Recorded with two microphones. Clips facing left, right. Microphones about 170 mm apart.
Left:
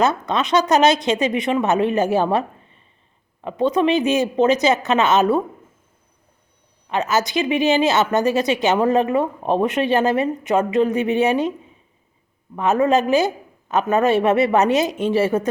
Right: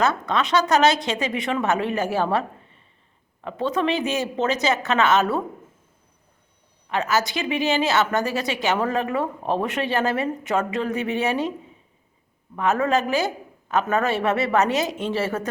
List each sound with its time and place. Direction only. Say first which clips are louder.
0.0 s a woman's voice: left 3 dB; 20° left (ahead or behind)
3.4 s speech: left 5 dB; 15° left (ahead or behind)
6.9 s a woman's voice: left 3 dB; 20° left (ahead or behind)
12.5 s a woman's voice: left 4 dB; 20° left (ahead or behind)